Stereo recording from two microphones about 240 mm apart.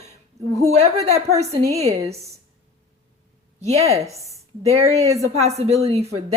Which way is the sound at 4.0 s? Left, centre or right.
Centre.